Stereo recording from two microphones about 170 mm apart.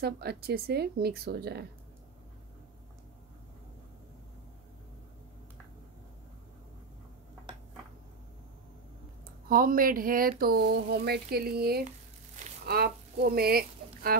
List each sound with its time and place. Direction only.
0.0 s speech: 70° right (ahead or behind)
9.5 s speech: 55° right (ahead or behind)